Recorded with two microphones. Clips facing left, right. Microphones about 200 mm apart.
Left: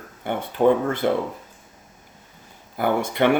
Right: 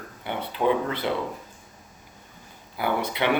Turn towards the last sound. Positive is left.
turn(degrees=50)  # may be behind; listen again after turning